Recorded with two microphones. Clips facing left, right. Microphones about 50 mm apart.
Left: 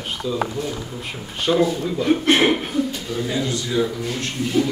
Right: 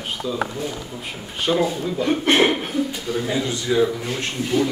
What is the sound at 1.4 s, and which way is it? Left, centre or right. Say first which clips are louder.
Speech: left 2 dB; centre.